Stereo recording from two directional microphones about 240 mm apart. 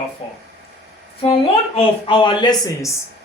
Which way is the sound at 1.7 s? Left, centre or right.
Left.